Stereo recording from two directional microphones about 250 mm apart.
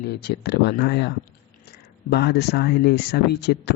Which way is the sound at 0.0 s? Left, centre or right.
Left.